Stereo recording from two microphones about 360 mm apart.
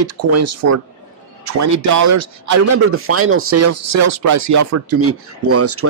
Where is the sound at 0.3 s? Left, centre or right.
Right.